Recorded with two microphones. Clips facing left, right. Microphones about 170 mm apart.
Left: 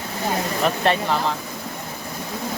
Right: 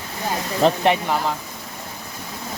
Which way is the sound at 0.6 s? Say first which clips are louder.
Right 6 dB; 30° right (ahead or behind).